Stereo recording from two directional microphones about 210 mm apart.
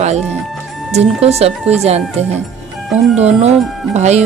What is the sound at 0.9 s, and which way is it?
Speech, 30° right (ahead or behind).